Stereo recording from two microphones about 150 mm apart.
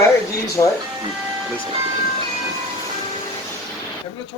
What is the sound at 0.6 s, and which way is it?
Speech, 25° left (ahead or behind).